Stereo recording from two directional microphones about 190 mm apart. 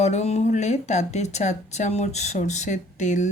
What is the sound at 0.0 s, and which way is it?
Speech, 35° left (ahead or behind).